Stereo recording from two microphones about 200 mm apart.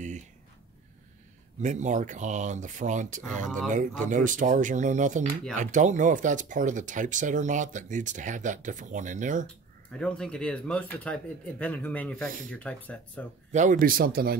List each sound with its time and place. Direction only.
1.6 s speech: 35° right (ahead or behind)
3.4 s speech: 5° left (ahead or behind)
3.7 s speech: 40° right (ahead or behind)
9.9 s speech: 5° left (ahead or behind)
13.5 s speech: 40° right (ahead or behind)